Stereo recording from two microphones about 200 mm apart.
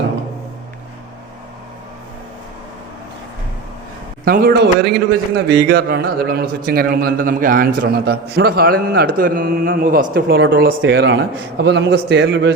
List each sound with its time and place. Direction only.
4.3 s a man's voice: 50° right (ahead or behind)
10.8 s a man's voice: 60° right (ahead or behind)